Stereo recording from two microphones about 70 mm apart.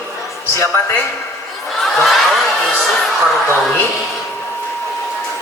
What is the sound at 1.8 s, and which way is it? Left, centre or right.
Snicker, centre.